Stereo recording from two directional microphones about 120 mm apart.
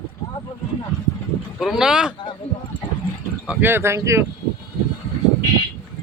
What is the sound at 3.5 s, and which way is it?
Speech, 15° right (ahead or behind).